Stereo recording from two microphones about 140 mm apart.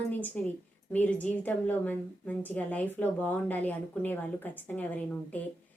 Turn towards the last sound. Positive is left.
turn(degrees=10)  # may be behind; listen again after turning